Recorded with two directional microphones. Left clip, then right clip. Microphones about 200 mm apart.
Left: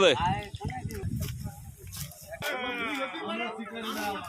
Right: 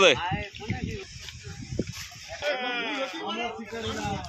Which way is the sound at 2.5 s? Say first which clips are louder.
Even; 30° left (ahead or behind).